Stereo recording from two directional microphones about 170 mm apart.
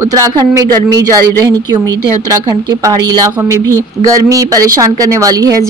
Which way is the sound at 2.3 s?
20° right (ahead or behind).